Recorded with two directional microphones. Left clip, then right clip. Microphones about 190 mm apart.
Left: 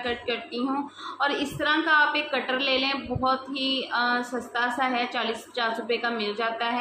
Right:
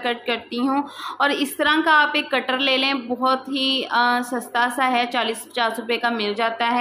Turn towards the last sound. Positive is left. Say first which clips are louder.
# right 6 dB
turn(degrees=-45)  # may be behind; listen again after turning